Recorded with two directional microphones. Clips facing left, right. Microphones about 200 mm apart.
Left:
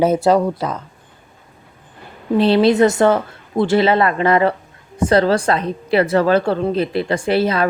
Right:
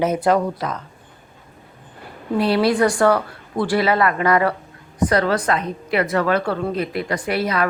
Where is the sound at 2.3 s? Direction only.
25° left (ahead or behind).